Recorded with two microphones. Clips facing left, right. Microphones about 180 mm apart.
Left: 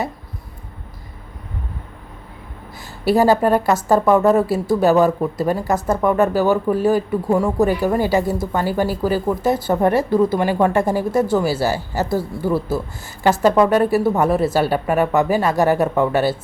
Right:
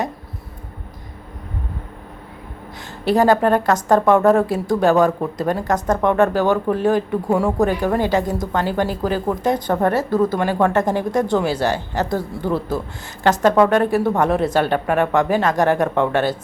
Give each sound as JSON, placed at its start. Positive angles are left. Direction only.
{"t": 3.0, "sound": "a woman's voice", "side_deg": 10}